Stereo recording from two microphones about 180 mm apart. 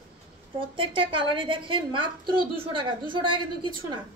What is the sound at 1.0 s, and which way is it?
A woman's voice, 30° right (ahead or behind).